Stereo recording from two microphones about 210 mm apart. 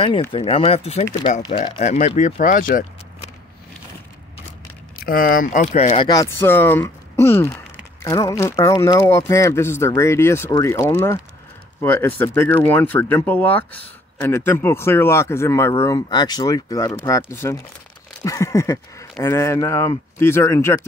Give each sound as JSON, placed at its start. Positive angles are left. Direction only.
{"t": 0.3, "sound": "speech", "side_deg": 25}
{"t": 5.0, "sound": "speech", "side_deg": 45}
{"t": 6.0, "sound": "speech", "side_deg": 15}